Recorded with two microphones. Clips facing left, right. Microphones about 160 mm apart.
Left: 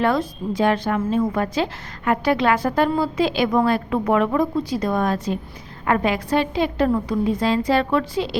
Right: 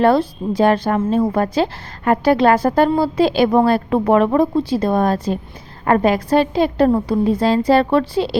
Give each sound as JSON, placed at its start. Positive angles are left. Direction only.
{"t": 0.0, "sound": "a woman's voice", "side_deg": -30}